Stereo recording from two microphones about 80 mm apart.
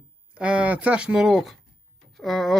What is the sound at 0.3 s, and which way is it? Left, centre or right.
A man's voice, centre.